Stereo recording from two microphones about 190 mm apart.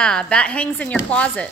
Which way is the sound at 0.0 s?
5° left (ahead or behind).